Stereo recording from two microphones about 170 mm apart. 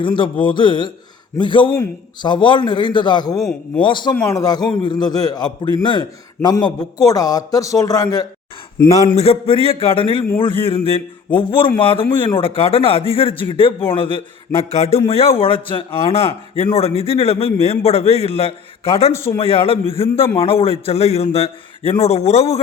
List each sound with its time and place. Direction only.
0.0 s a man's voice: 30° left (ahead or behind)
3.3 s a man's voice: centre (ahead or behind)
3.8 s a man's voice: 25° left (ahead or behind)
4.1 s a man's voice: 15° left (ahead or behind)
9.1 s a man's voice: 35° left (ahead or behind)
19.1 s speech: 15° left (ahead or behind)
19.4 s a man's voice: 35° left (ahead or behind)